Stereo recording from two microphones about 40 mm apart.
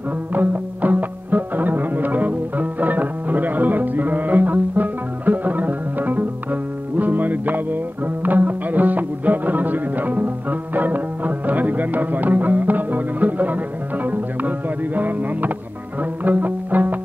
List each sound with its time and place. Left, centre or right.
0.3 s music: right